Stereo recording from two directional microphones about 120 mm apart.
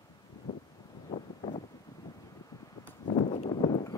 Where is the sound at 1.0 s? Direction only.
65° left (ahead or behind).